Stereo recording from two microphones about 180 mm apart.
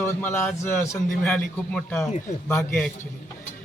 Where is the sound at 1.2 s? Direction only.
5° left (ahead or behind).